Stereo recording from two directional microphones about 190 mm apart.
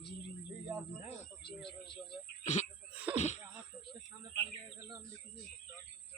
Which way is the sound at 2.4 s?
35° left (ahead or behind).